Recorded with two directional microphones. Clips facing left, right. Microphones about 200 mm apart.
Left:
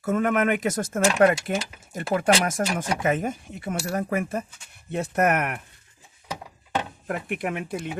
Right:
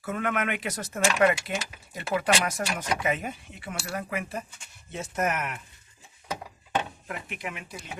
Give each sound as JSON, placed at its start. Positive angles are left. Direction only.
{"t": 0.0, "sound": "speech", "side_deg": 40}
{"t": 4.9, "sound": "speech", "side_deg": 60}
{"t": 7.1, "sound": "speech", "side_deg": 55}